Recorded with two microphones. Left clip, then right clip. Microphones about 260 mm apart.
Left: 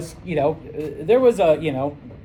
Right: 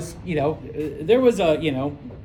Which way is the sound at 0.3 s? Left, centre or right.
Centre.